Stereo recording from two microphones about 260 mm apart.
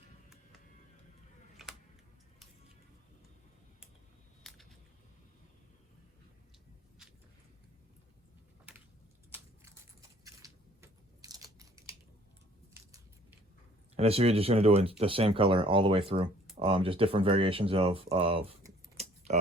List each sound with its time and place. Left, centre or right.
4.4 s a sound: centre
8.7 s keys jangling: centre
10.2 s biting: centre
12.7 s a sound: centre
13.9 s speech: right
18.9 s keys jangling: right